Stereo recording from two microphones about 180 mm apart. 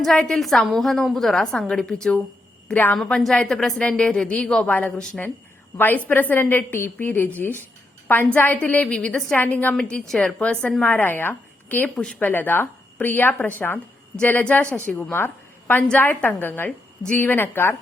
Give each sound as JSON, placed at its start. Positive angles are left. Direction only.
{"t": 0.0, "sound": "a woman's voice", "side_deg": 0}